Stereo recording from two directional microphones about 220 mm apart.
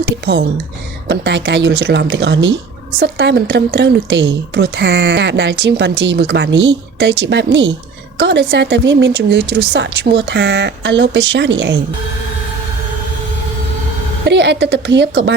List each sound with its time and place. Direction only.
1.0 s speech: 50° right (ahead or behind)
14.3 s speech: 50° right (ahead or behind)